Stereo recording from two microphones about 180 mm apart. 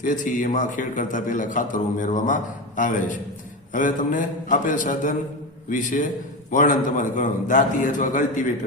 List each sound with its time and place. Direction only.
0.0 s a man's voice: 45° left (ahead or behind)